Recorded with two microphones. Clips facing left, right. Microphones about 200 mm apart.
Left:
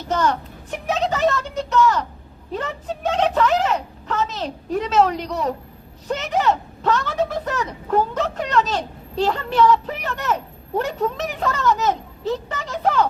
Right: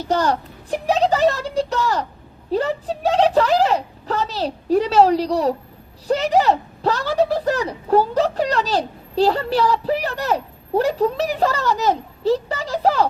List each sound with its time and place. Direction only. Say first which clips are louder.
0.0 s speech: right 2 dB; 35° right (ahead or behind)